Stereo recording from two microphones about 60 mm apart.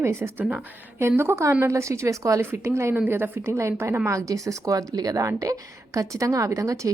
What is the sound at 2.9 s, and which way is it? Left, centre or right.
A woman's voice, right.